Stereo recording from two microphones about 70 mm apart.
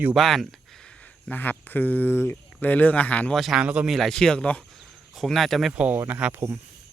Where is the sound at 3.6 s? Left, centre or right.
Centre.